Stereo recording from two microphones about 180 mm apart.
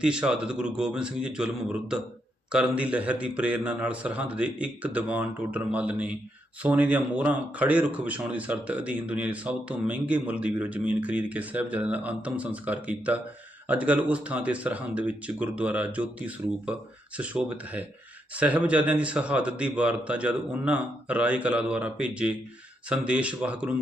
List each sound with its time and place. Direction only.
0.0 s a man's voice: 5° right (ahead or behind)